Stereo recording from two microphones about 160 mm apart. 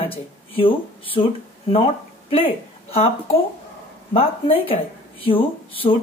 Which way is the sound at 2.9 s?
40° left (ahead or behind).